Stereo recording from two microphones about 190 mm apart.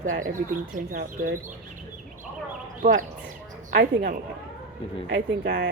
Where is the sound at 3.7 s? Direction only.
60° right (ahead or behind).